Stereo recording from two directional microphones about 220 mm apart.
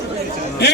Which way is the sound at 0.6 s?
50° left (ahead or behind).